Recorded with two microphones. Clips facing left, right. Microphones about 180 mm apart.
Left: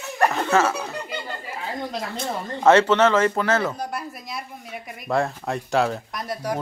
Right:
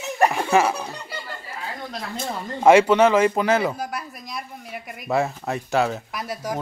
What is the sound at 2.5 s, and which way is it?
Speech, 10° right (ahead or behind).